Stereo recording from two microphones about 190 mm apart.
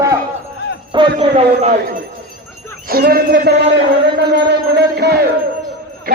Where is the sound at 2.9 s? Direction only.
50° right (ahead or behind).